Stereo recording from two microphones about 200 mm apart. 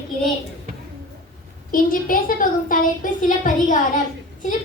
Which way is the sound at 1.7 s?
45° left (ahead or behind).